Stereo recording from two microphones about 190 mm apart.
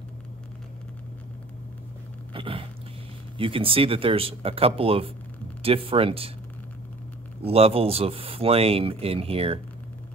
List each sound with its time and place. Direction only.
2.3 s speech: 30° right (ahead or behind)
7.4 s speech: 30° right (ahead or behind)